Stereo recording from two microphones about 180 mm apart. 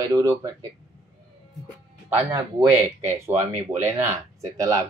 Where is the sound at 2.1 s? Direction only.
15° right (ahead or behind).